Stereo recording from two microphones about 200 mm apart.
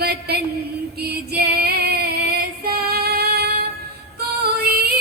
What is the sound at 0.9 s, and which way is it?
Female singing, 55° right (ahead or behind).